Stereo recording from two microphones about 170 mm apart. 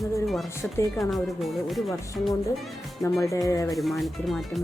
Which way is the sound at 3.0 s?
20° left (ahead or behind).